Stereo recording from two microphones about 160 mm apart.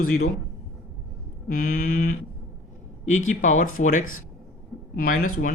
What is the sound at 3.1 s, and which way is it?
Speech, 50° left (ahead or behind).